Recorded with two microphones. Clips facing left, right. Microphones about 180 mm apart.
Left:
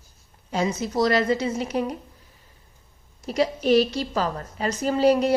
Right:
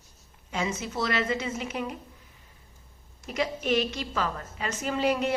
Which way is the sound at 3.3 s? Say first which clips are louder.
Left 7 dB; 35° left (ahead or behind).